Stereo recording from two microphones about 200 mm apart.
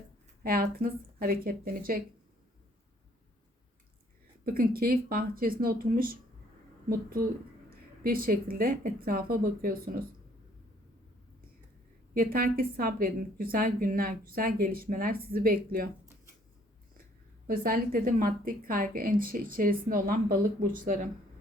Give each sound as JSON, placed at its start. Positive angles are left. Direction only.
{"t": 0.4, "sound": "a woman's voice", "side_deg": -50}
{"t": 4.4, "sound": "a woman's voice", "side_deg": -50}
{"t": 12.1, "sound": "a woman's voice", "side_deg": -45}
{"t": 17.4, "sound": "a woman's voice", "side_deg": -45}